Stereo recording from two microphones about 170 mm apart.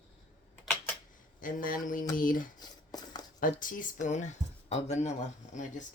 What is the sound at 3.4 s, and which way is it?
Speech, 50° left (ahead or behind).